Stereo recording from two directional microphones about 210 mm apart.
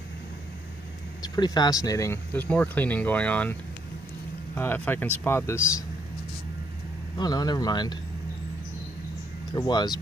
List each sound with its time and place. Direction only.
1.2 s speech: 20° left (ahead or behind)
4.6 s speech: 10° left (ahead or behind)
7.2 s speech: 20° left (ahead or behind)
9.5 s speech: 20° left (ahead or behind)